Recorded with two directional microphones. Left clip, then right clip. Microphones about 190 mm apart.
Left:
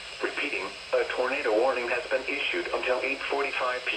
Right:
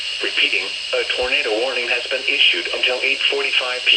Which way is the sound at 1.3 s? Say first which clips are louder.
Right 4 dB; 5° left (ahead or behind).